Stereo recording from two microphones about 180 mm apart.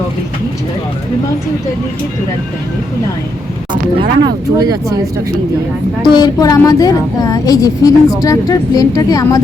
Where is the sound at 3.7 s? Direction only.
25° right (ahead or behind).